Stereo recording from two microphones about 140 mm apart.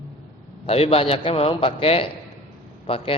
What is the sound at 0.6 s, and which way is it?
A man's voice, 45° left (ahead or behind).